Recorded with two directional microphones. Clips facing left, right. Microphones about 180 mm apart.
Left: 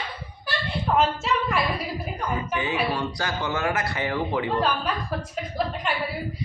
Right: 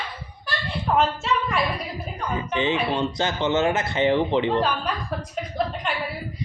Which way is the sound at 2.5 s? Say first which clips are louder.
Right 5 dB; 25° right (ahead or behind).